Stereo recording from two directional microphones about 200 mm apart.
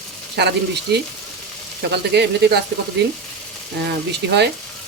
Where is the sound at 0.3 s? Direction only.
55° right (ahead or behind).